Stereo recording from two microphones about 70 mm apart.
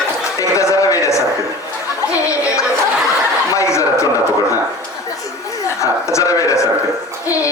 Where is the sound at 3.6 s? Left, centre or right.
Left.